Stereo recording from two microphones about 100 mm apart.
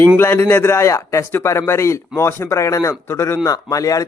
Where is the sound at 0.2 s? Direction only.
25° left (ahead or behind).